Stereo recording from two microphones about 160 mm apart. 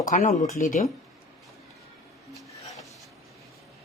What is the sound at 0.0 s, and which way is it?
Speech, 50° left (ahead or behind).